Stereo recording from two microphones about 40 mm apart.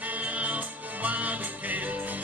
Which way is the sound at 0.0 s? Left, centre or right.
Right.